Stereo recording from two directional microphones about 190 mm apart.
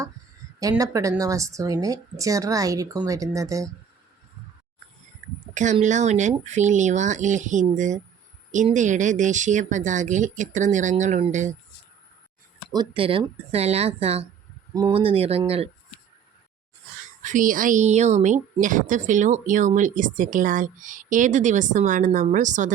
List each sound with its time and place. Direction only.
0.6 s speech: 20° right (ahead or behind)
5.8 s a woman's voice: 40° right (ahead or behind)
12.7 s a woman's voice: 25° right (ahead or behind)
17.2 s a woman's voice: 45° right (ahead or behind)